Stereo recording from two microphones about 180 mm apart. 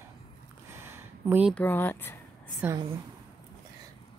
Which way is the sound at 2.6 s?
10° right (ahead or behind).